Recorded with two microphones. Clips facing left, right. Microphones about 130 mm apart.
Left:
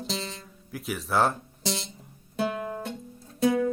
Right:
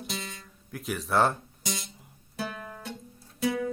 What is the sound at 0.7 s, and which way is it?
Speech, centre (ahead or behind).